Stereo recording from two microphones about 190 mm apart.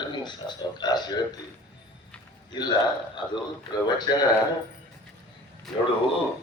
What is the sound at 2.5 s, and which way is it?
Speech, 25° left (ahead or behind).